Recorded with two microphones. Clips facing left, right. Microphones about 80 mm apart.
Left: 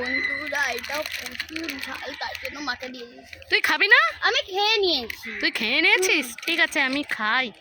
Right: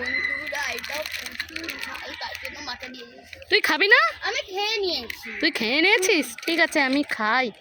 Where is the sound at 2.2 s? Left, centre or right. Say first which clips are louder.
Left 3 dB; left.